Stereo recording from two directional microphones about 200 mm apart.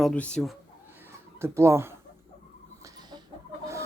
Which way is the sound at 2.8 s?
20° right (ahead or behind).